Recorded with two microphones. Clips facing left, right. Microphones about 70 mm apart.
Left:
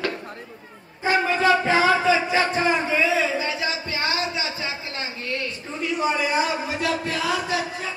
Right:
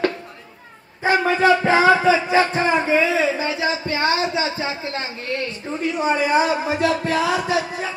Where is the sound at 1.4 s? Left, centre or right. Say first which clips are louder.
Right 4 dB; right.